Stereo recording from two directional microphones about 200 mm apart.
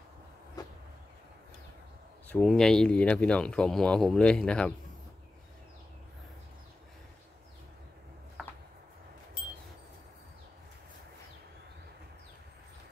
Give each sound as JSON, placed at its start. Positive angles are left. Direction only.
{"t": 2.2, "sound": "speech", "side_deg": 5}